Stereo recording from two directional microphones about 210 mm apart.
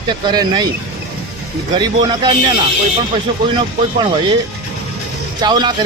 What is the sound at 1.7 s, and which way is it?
Speech, 20° right (ahead or behind).